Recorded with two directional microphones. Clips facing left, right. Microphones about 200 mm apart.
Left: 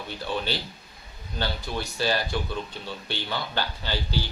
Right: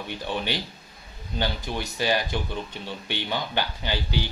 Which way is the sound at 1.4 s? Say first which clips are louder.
Right 1 dB; 15° right (ahead or behind).